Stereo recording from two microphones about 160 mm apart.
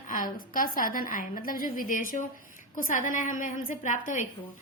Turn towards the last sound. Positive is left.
turn(degrees=55)  # may be behind; listen again after turning